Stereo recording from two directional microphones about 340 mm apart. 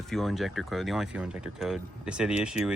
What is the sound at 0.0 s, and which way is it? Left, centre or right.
Speech, centre.